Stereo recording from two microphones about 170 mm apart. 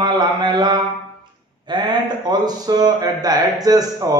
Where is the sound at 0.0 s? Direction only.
25° right (ahead or behind).